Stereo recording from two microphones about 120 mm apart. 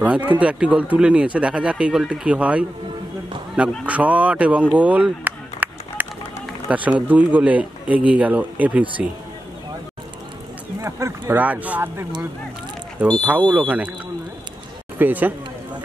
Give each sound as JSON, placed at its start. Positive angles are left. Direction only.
{"t": 0.0, "sound": "speech", "side_deg": -10}
{"t": 3.8, "sound": "speech", "side_deg": -10}
{"t": 4.7, "sound": "a sound", "side_deg": -10}
{"t": 6.7, "sound": "speech", "side_deg": -10}
{"t": 10.8, "sound": "speech", "side_deg": -25}
{"t": 15.0, "sound": "speech", "side_deg": -15}